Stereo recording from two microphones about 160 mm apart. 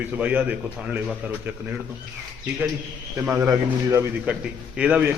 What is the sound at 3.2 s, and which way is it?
A man's voice, 10° right (ahead or behind).